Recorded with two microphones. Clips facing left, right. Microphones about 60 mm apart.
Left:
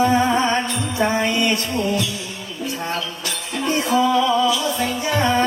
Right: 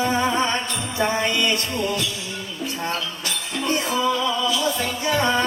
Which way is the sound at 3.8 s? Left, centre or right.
Left.